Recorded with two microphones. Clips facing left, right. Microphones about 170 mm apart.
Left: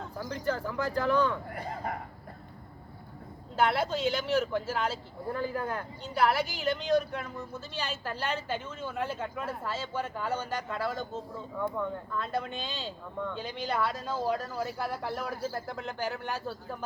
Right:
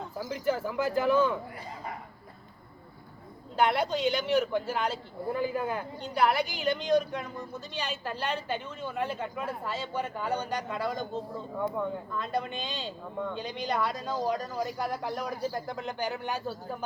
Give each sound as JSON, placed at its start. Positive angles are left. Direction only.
{"t": 0.2, "sound": "a man's voice", "side_deg": -5}
{"t": 1.5, "sound": "speech", "side_deg": 55}
{"t": 3.5, "sound": "a man's voice", "side_deg": 5}